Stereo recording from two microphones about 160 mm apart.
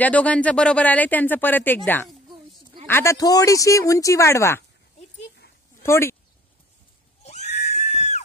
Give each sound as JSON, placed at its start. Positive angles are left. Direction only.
{"t": 0.0, "sound": "speech", "side_deg": 10}
{"t": 2.9, "sound": "speech", "side_deg": 15}
{"t": 5.8, "sound": "speech", "side_deg": 15}
{"t": 7.2, "sound": "neigh", "side_deg": 45}